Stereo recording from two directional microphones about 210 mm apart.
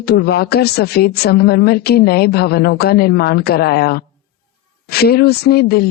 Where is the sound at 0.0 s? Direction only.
50° left (ahead or behind).